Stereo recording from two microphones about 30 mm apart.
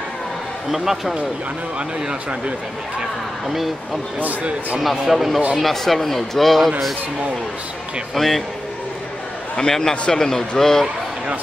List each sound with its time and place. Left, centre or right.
0.7 s speech: centre
3.0 s speech: centre
5.6 s speech: centre
8.1 s a man's voice: centre
9.6 s a man's voice: left